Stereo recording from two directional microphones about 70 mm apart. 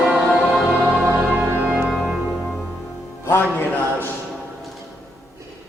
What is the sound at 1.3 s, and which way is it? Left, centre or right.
Music, centre.